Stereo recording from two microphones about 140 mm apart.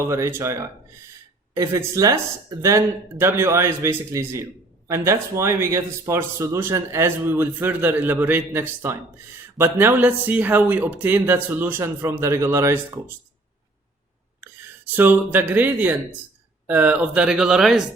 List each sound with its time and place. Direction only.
0.1 s a man's voice: 20° right (ahead or behind)
14.4 s speech: 15° right (ahead or behind)